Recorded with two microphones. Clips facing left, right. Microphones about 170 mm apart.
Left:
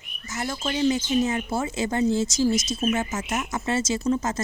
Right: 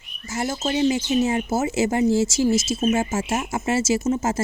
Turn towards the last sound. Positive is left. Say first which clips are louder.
# right 3 dB
turn(degrees=-25)  # may be behind; listen again after turning